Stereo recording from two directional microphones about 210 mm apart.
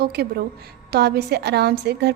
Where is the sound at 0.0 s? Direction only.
50° right (ahead or behind).